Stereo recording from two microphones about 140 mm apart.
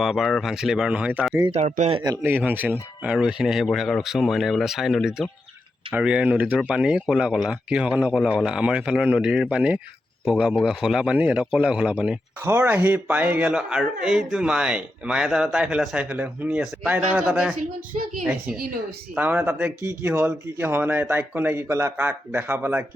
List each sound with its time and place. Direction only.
0.0 s speech: centre (ahead or behind)
1.9 s a man's voice: 35° right (ahead or behind)
2.2 s speech: 15° right (ahead or behind)
18.4 s speech: 90° right
19.1 s speech: 10° right (ahead or behind)
21.9 s speech: 10° right (ahead or behind)